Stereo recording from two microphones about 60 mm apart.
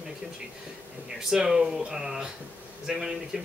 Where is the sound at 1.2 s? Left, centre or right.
Centre.